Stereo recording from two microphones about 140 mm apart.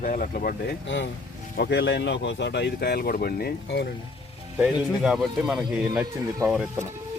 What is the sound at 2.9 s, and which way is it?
Speech, 90° left.